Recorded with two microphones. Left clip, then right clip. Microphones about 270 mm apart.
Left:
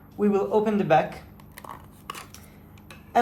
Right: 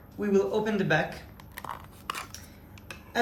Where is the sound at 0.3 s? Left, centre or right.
Left.